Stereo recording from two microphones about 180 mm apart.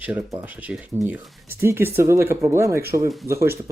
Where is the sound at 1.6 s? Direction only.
15° right (ahead or behind).